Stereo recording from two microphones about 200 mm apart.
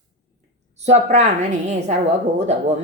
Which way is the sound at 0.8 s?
35° right (ahead or behind).